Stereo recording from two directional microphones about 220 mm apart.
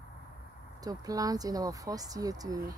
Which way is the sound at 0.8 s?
15° right (ahead or behind).